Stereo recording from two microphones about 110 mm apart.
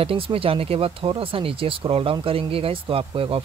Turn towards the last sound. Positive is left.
turn(degrees=-60)  # may be behind; listen again after turning